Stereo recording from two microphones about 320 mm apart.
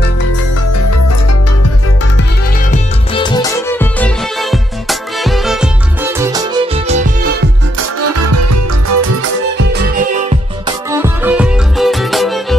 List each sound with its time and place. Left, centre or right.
3.2 s music: centre
8.0 s music: right
10.9 s music: centre